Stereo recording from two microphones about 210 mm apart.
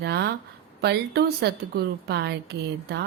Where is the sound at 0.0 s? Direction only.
55° right (ahead or behind).